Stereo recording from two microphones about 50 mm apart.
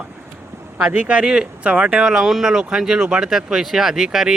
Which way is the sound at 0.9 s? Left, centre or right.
Right.